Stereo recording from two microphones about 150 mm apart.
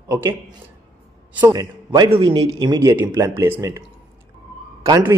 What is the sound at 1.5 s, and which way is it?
A man's voice, 25° right (ahead or behind).